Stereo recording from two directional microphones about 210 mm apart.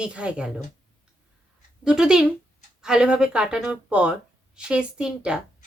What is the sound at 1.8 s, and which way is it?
Speech, 5° right (ahead or behind).